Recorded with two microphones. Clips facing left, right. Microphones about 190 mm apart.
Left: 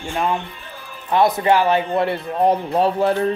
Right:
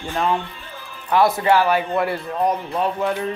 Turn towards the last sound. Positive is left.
turn(degrees=35)  # may be behind; listen again after turning